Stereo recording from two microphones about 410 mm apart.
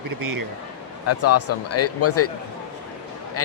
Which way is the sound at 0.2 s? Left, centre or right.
Right.